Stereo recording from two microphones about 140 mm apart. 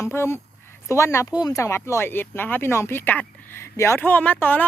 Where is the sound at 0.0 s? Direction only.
20° left (ahead or behind).